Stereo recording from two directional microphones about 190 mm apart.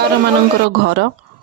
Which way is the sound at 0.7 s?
65° right (ahead or behind).